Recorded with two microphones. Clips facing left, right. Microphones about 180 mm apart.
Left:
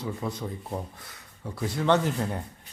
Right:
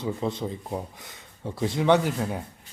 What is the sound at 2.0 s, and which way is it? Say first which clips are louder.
Speech: right 1 dB; 5° right (ahead or behind).